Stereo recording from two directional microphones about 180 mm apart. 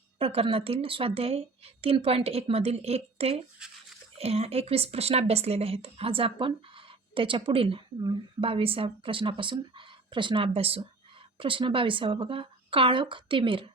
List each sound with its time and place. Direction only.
0.2 s a woman's voice: 30° right (ahead or behind)